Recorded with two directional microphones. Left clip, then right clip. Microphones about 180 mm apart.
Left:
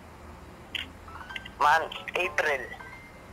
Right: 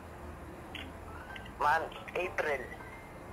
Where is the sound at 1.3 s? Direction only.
20° left (ahead or behind).